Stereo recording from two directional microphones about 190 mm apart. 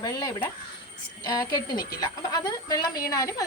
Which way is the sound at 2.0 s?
20° left (ahead or behind).